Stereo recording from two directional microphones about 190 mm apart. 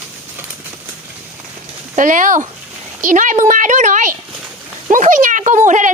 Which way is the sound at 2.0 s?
45° right (ahead or behind).